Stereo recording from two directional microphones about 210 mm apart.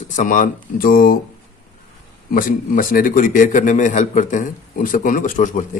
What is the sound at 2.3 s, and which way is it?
A man's voice, 40° left (ahead or behind).